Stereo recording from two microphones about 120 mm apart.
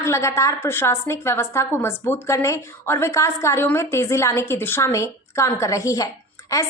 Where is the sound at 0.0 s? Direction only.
25° left (ahead or behind).